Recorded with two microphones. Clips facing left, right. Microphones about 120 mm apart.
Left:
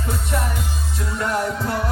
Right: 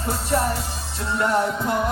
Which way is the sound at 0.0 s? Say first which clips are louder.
Right 3 dB; 35° right (ahead or behind).